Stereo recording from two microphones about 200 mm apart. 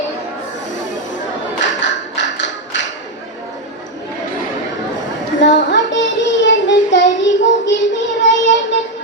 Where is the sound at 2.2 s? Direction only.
65° left (ahead or behind).